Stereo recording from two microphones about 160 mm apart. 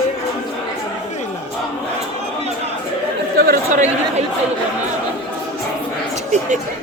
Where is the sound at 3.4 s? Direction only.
60° right (ahead or behind).